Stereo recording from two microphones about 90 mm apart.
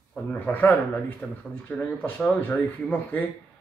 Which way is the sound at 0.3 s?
20° left (ahead or behind).